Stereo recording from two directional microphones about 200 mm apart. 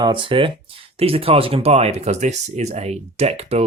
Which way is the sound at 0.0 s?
25° right (ahead or behind).